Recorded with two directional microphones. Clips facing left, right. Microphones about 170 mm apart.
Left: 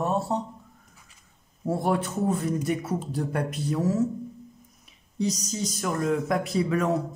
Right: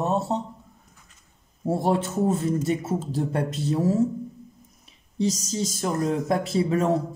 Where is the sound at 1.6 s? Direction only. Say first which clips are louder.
Right 2 dB; 25° right (ahead or behind).